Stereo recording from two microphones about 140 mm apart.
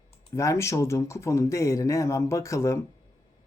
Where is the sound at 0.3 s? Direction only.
20° left (ahead or behind).